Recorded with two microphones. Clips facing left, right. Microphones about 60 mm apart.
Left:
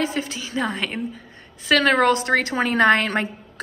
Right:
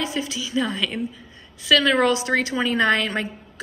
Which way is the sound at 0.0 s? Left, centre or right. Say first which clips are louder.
Left 2 dB; left.